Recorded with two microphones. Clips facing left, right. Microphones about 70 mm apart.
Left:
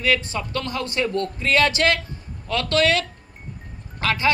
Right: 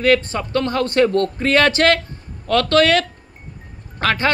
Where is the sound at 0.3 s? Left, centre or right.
Right.